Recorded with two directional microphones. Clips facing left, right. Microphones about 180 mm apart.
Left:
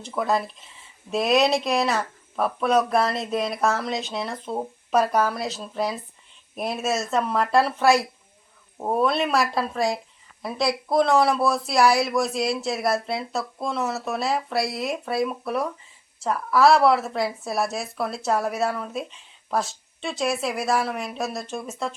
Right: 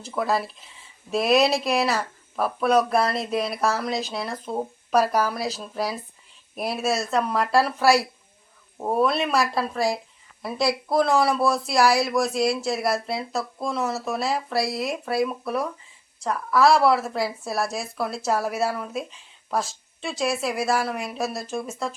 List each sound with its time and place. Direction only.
0.0 s speech: centre (ahead or behind)